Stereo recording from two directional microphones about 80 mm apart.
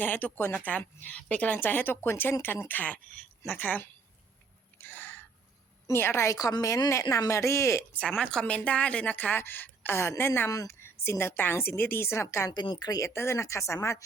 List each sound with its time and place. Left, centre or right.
0.0 s speech: left
4.8 s a sound: left
5.9 s speech: left
8.2 s a woman's voice: centre; by 10.5 s left
10.5 s speech: left
10.8 s speech: left
12.5 s speech: left
13.0 s speech: left